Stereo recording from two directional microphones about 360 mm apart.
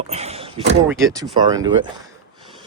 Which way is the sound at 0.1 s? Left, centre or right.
Centre.